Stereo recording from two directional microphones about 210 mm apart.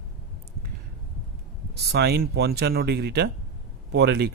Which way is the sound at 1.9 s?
50° right (ahead or behind).